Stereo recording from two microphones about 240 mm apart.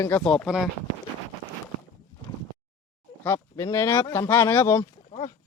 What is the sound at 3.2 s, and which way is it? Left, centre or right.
Speech, centre.